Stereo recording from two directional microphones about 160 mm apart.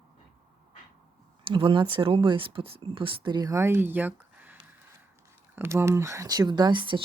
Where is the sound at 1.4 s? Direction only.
35° right (ahead or behind).